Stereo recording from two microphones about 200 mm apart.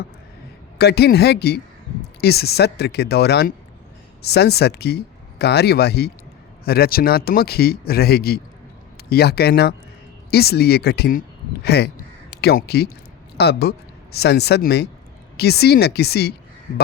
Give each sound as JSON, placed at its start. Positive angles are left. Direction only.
{"t": 0.8, "sound": "speech", "side_deg": 55}